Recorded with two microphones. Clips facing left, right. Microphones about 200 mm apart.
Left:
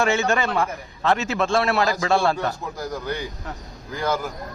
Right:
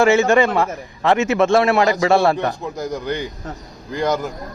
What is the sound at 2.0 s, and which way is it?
Speech, 65° right (ahead or behind).